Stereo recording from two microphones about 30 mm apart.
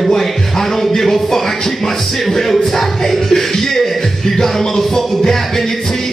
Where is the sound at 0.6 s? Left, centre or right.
Centre.